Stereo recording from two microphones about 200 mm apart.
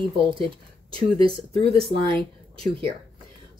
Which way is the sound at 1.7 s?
25° right (ahead or behind).